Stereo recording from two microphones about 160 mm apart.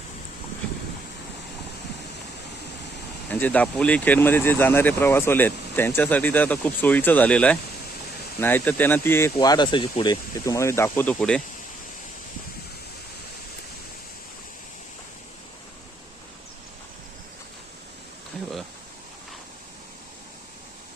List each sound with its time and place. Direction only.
3.2 s speech: 10° left (ahead or behind)